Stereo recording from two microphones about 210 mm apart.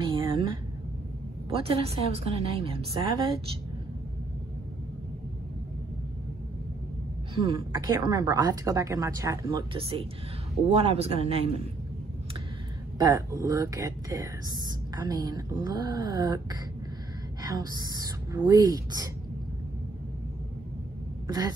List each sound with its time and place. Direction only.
0.0 s a sound: 25° right (ahead or behind)
1.5 s a woman's voice: 25° right (ahead or behind)
7.5 s a woman's voice: 20° right (ahead or behind)
13.0 s a woman's voice: 15° right (ahead or behind)
21.3 s speech: 20° right (ahead or behind)